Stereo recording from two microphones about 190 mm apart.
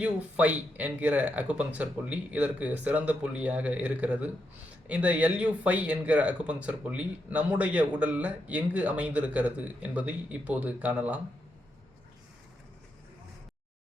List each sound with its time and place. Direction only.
0.0 s speech: 5° right (ahead or behind)